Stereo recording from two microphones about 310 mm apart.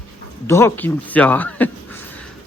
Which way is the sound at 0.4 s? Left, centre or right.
Centre.